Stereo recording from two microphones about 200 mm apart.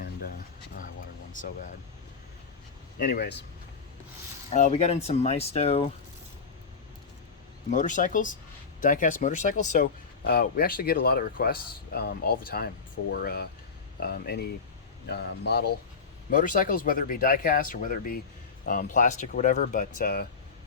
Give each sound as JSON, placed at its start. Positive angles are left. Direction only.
{"t": 0.0, "sound": "a sound", "side_deg": 50}
{"t": 1.3, "sound": "speech", "side_deg": 40}
{"t": 3.0, "sound": "speech", "side_deg": 55}
{"t": 4.5, "sound": "speech", "side_deg": 35}
{"t": 7.7, "sound": "a man's voice", "side_deg": 40}
{"t": 16.3, "sound": "speech", "side_deg": 45}